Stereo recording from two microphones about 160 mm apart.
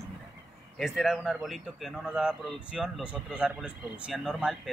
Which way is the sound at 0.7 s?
Centre (ahead or behind).